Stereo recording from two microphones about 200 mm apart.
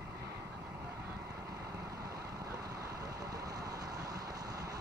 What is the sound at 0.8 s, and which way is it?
Vehicle, 15° right (ahead or behind).